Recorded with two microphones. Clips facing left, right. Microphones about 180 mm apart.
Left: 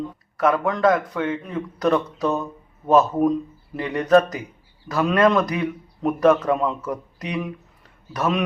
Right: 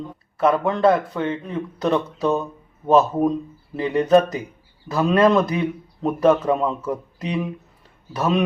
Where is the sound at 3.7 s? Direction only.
25° right (ahead or behind).